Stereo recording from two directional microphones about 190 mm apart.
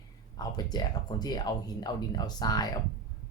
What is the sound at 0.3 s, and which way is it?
Speech, 20° left (ahead or behind).